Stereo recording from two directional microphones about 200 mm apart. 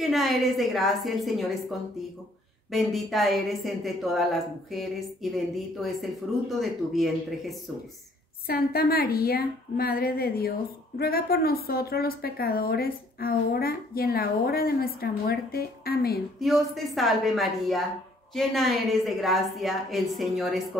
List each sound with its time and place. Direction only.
0.1 s a woman's voice: centre (ahead or behind)
8.5 s a woman's voice: 50° left (ahead or behind)
16.3 s a woman's voice: centre (ahead or behind)